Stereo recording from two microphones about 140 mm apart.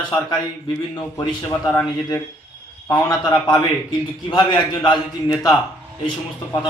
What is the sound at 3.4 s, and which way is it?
A man's voice, 30° left (ahead or behind).